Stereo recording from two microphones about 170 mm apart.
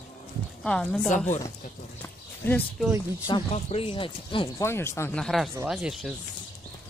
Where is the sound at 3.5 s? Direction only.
35° left (ahead or behind).